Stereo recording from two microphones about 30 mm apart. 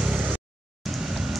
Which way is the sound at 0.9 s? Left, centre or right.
Centre.